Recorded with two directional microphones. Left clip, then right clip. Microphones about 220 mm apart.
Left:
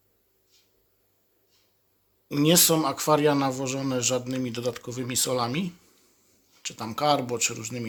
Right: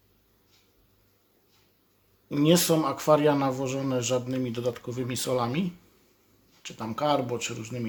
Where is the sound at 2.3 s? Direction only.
20° left (ahead or behind).